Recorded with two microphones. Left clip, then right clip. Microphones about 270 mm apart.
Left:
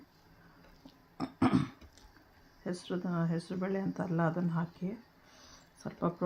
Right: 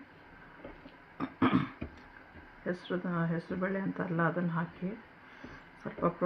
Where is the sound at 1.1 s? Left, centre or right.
Left.